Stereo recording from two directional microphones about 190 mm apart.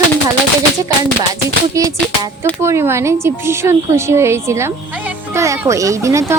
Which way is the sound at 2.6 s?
15° right (ahead or behind).